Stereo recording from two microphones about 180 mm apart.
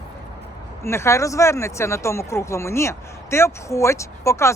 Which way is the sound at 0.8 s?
15° left (ahead or behind).